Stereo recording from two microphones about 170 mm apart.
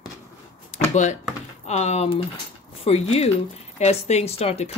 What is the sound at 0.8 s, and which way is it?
Speech, 45° left (ahead or behind).